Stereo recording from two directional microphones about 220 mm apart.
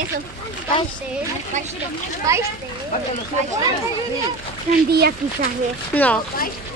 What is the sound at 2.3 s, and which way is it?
Speech, 15° right (ahead or behind).